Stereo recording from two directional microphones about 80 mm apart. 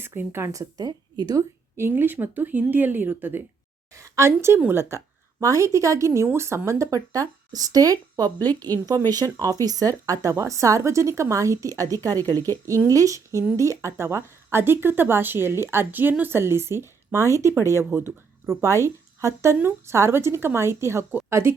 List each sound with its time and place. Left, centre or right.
0.0 s speech: right
1.7 s speech: right
3.9 s a woman's voice: right
8.2 s a woman's voice: left
9.4 s speech: right